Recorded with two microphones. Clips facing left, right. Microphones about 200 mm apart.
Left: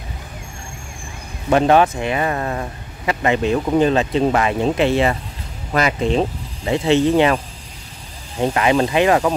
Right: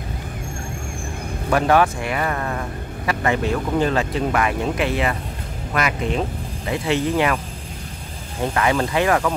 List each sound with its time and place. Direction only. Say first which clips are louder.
1.5 s speech: left 3 dB; 20° left (ahead or behind)
8.4 s speech: left 4 dB; 20° left (ahead or behind)